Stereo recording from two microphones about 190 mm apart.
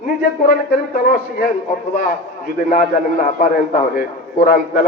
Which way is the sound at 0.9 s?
50° left (ahead or behind).